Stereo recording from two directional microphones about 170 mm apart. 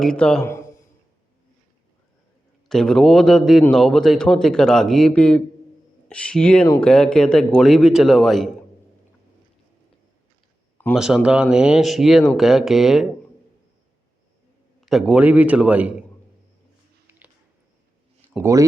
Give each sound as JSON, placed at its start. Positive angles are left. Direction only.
{"t": 0.0, "sound": "a man's voice", "side_deg": 5}
{"t": 0.4, "sound": "a man's voice", "side_deg": 15}
{"t": 2.6, "sound": "a man's voice", "side_deg": 5}
{"t": 10.9, "sound": "a man's voice", "side_deg": -5}
{"t": 14.8, "sound": "a man's voice", "side_deg": 0}
{"t": 17.1, "sound": "a sound", "side_deg": -10}
{"t": 18.3, "sound": "a man's voice", "side_deg": -15}